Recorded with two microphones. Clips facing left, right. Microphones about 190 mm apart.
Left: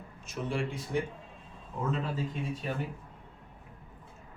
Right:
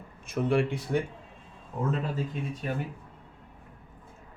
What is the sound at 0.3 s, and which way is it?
Speech, 60° right (ahead or behind).